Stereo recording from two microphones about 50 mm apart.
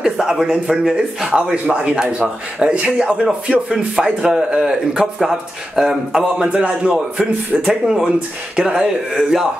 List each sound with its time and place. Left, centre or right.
0.0 s a man's voice: centre
5.2 s a man's voice: centre